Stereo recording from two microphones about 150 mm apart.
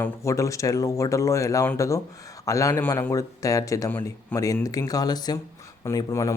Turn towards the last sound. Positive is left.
turn(degrees=20)  # may be behind; listen again after turning